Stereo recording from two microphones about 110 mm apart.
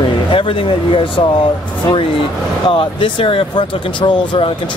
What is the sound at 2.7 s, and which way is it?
Speech, 50° left (ahead or behind).